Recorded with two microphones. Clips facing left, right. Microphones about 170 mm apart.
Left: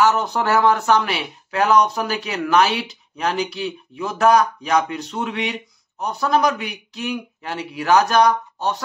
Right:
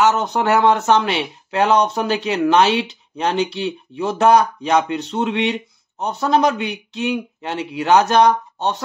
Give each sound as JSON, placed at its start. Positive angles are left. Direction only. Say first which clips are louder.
{"t": 0.0, "sound": "speech", "louder": "right 1 dB", "side_deg": -20}